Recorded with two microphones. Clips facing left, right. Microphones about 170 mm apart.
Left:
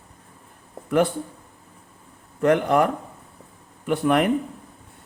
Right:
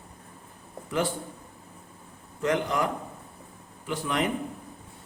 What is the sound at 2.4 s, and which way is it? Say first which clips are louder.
Speech: left 8 dB; 55° left (ahead or behind).